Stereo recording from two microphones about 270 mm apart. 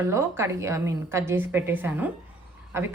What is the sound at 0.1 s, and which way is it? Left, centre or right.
A woman's voice, centre.